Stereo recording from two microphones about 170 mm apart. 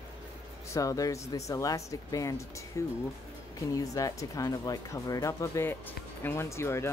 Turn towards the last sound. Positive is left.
turn(degrees=15)  # may be behind; listen again after turning